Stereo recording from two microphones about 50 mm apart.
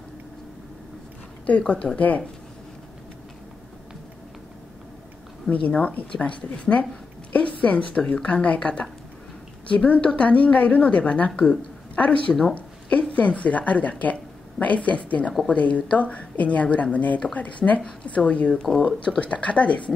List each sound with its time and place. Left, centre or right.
1.7 s a woman's voice: left
5.5 s a woman's voice: centre
5.8 s a woman's voice: left